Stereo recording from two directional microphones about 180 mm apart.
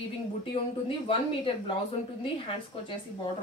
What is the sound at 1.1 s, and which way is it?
Speech, 30° left (ahead or behind).